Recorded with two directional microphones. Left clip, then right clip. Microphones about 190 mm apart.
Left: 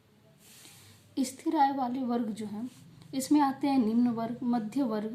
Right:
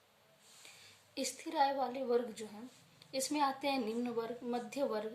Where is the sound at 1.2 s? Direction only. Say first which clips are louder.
Left 7 dB; 25° left (ahead or behind).